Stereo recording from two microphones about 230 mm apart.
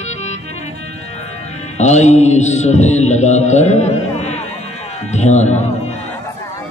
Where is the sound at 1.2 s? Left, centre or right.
Left.